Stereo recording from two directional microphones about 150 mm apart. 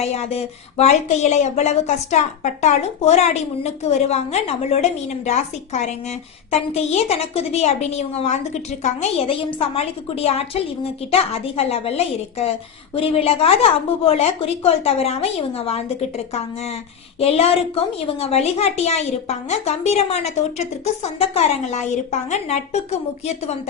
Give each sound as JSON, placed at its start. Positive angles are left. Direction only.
{"t": 0.0, "sound": "a woman's voice", "side_deg": 45}